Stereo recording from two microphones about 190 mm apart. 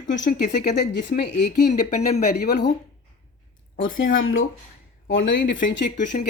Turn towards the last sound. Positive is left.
turn(degrees=70)  # may be behind; listen again after turning